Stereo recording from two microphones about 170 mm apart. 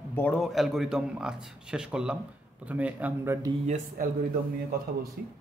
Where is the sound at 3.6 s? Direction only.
50° right (ahead or behind).